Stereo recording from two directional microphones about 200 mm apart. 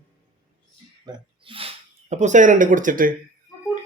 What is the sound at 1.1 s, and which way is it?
Speech, 25° right (ahead or behind).